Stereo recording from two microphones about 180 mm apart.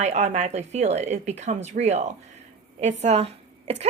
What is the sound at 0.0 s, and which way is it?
A woman's voice, 40° right (ahead or behind).